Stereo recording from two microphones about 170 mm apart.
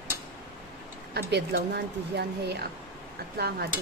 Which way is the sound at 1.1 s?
75° right (ahead or behind).